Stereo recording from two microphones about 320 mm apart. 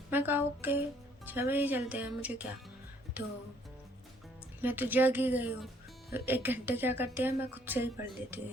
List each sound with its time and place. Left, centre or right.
0.1 s speech: centre
4.6 s speech: centre